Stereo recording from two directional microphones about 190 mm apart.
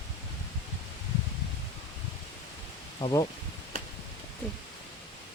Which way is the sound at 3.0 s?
25° left (ahead or behind).